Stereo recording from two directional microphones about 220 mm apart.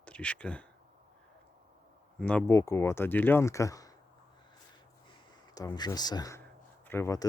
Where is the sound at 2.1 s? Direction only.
5° left (ahead or behind).